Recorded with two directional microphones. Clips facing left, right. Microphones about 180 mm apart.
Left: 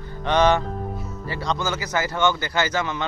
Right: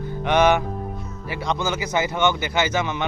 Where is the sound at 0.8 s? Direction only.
5° left (ahead or behind).